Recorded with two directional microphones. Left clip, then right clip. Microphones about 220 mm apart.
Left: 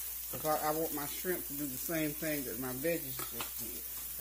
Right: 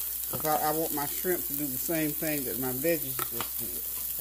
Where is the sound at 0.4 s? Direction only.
35° right (ahead or behind).